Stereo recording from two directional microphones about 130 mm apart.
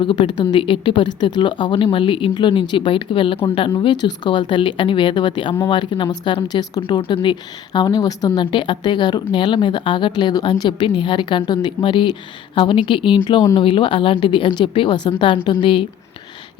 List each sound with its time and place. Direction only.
0.0 s a woman's voice: 40° left (ahead or behind)